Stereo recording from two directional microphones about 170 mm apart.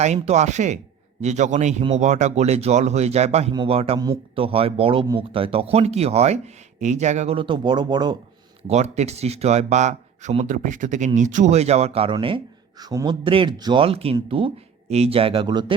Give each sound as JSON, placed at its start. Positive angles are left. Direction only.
{"t": 0.0, "sound": "speech", "side_deg": -40}
{"t": 8.6, "sound": "a man's voice", "side_deg": -40}